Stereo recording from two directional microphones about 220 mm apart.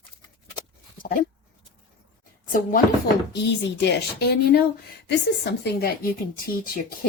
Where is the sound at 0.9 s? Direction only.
40° left (ahead or behind).